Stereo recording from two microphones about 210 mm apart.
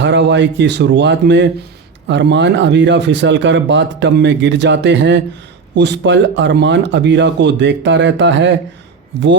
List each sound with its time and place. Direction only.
0.0 s speech: 60° right (ahead or behind)